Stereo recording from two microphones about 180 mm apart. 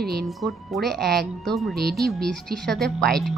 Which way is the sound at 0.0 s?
60° right (ahead or behind).